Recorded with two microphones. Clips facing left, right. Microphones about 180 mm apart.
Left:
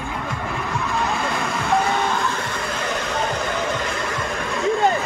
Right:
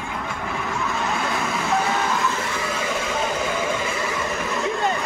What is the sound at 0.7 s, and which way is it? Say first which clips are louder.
Vehicle: left 3 dB; centre (ahead or behind).